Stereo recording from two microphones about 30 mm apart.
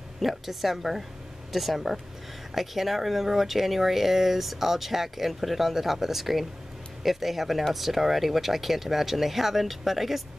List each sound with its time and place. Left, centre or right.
0.2 s speech: centre